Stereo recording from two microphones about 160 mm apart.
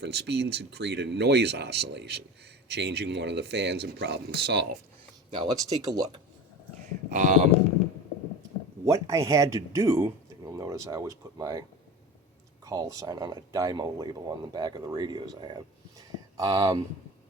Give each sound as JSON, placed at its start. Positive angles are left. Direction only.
{"t": 0.0, "sound": "speech", "side_deg": -90}
{"t": 5.4, "sound": "speech", "side_deg": -25}
{"t": 7.1, "sound": "speech", "side_deg": -50}
{"t": 8.8, "sound": "speech", "side_deg": -20}
{"t": 12.6, "sound": "speech", "side_deg": -20}